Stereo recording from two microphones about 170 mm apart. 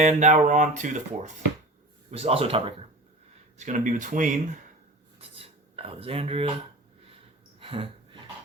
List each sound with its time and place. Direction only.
0.0 s speech: 45° right (ahead or behind)
3.6 s speech: 50° right (ahead or behind)
5.4 s cutlery: 35° right (ahead or behind)
7.6 s a sound: 30° right (ahead or behind)